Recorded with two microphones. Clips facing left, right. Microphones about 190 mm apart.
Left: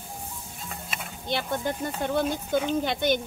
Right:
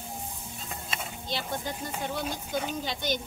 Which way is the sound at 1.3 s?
55° left (ahead or behind).